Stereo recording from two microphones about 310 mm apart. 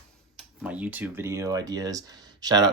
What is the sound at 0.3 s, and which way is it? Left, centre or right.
Speech, centre.